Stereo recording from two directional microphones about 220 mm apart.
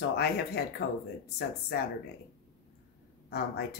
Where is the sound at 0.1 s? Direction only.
50° left (ahead or behind).